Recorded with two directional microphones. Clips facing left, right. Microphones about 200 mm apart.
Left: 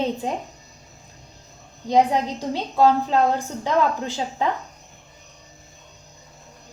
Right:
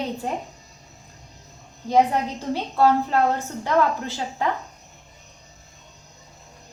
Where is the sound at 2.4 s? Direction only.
15° left (ahead or behind).